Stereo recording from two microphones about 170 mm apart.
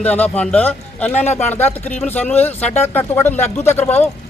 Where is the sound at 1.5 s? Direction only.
10° left (ahead or behind).